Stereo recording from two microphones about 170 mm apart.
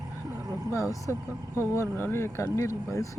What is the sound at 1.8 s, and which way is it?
Speech, 15° left (ahead or behind).